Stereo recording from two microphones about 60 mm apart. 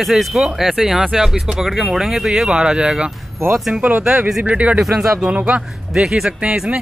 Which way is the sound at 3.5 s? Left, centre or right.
Centre.